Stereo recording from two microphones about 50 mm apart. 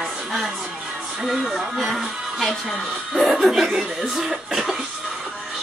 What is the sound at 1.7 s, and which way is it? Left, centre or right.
Speech, centre.